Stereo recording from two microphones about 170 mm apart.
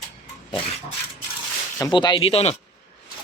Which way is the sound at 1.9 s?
30° left (ahead or behind).